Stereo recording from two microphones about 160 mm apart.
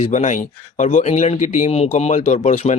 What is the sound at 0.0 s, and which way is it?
A man's voice, 50° left (ahead or behind).